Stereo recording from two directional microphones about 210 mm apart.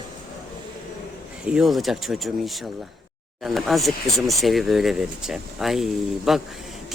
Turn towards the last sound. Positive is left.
turn(degrees=0)  # may be behind; listen again after turning